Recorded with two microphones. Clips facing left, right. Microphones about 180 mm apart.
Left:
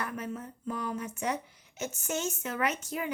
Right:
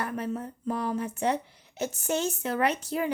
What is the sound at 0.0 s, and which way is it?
A child's voice, 35° right (ahead or behind).